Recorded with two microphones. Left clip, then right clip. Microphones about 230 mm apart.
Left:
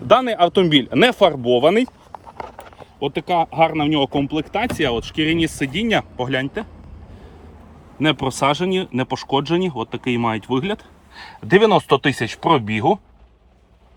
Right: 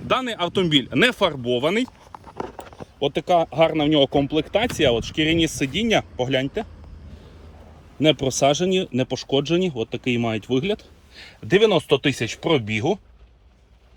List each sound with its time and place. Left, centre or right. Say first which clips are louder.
0.3 s speech: left 7 dB; centre
3.0 s speech: even; centre
7.9 s speech: even; centre